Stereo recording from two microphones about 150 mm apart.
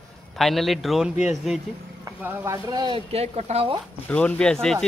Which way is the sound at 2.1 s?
20° right (ahead or behind).